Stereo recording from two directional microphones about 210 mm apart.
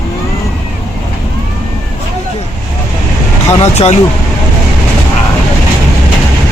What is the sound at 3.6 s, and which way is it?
Speech, 30° left (ahead or behind).